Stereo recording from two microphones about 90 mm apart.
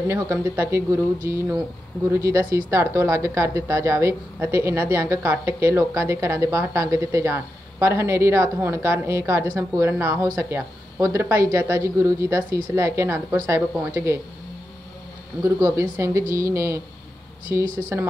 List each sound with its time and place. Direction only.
0.1 s a woman's voice: 30° right (ahead or behind)
15.4 s a woman's voice: 35° right (ahead or behind)
17.9 s speech: 30° right (ahead or behind)